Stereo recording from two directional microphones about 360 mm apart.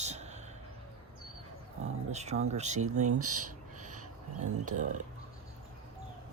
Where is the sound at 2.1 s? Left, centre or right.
Centre.